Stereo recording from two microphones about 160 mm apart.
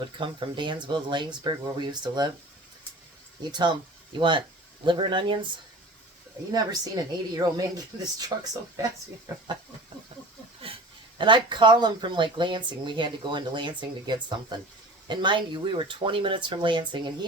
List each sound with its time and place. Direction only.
0.2 s speech: 30° right (ahead or behind)
3.5 s speech: 30° right (ahead or behind)
6.5 s speech: 25° right (ahead or behind)
9.3 s speech: 20° right (ahead or behind)
10.6 s speech: 35° right (ahead or behind)